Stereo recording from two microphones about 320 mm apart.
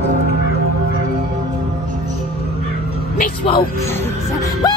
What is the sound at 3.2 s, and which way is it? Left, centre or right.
Music, left.